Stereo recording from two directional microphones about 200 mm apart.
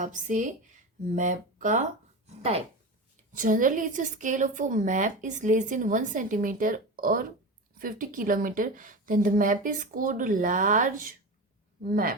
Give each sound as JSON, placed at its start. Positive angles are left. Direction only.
{"t": 0.0, "sound": "a woman's voice", "side_deg": -40}
{"t": 3.3, "sound": "a woman's voice", "side_deg": -40}